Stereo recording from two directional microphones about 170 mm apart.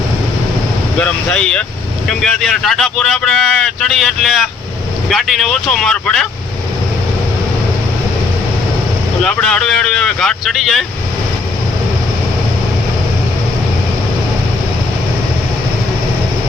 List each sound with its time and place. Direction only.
0.9 s speech: 5° left (ahead or behind)
9.2 s speech: 5° left (ahead or behind)